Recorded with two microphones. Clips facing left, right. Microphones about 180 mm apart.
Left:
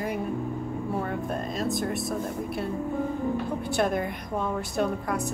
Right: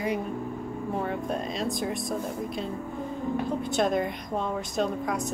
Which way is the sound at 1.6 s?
Centre (ahead or behind).